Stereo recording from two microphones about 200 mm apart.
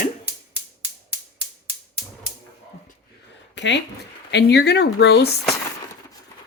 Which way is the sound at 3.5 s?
60° left (ahead or behind).